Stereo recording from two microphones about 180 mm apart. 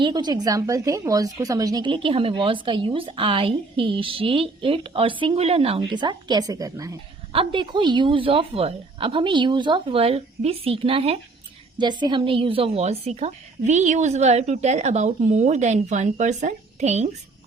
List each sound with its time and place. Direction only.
0.0 s a woman's voice: 25° right (ahead or behind)